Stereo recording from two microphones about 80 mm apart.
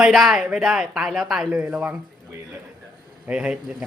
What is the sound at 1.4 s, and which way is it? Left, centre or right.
Speech, centre.